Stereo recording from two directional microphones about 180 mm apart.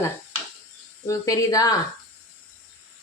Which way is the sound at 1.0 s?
20° left (ahead or behind).